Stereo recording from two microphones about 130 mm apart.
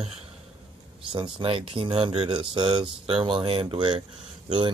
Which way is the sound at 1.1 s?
40° right (ahead or behind).